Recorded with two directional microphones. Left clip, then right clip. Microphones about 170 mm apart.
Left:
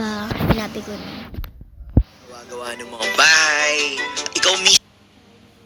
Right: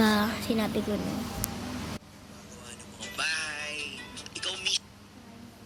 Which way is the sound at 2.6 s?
55° left (ahead or behind).